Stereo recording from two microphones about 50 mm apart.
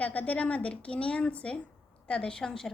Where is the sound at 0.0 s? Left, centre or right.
Left.